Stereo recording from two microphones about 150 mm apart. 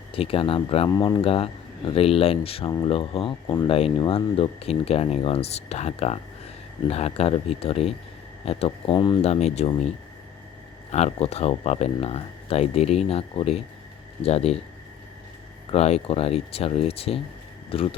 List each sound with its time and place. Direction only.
0.1 s speech: 40° left (ahead or behind)
2.6 s speech: 25° left (ahead or behind)
2.9 s speech: 40° left (ahead or behind)
3.7 s speech: 40° left (ahead or behind)
10.9 s speech: 45° left (ahead or behind)
15.7 s speech: 45° left (ahead or behind)